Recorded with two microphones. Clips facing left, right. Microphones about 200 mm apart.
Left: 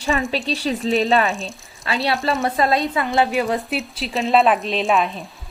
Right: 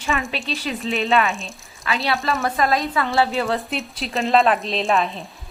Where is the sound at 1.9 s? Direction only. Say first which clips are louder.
Left 1 dB; 30° left (ahead or behind).